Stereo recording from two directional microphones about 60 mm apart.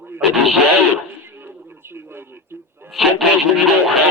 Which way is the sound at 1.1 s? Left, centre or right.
Right.